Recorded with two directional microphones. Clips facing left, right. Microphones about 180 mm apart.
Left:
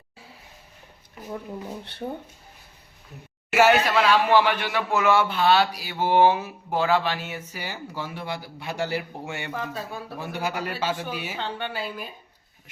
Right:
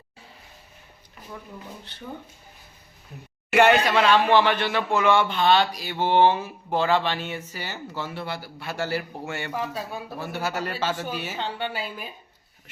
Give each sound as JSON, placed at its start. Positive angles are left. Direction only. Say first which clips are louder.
{"t": 2.0, "sound": "speech", "louder": "left 5 dB", "side_deg": 40}
{"t": 3.5, "sound": "speech", "louder": "right 1 dB", "side_deg": 5}
{"t": 9.5, "sound": "speech", "louder": "right 2 dB", "side_deg": -10}
{"t": 10.2, "sound": "speech", "louder": "even", "side_deg": 15}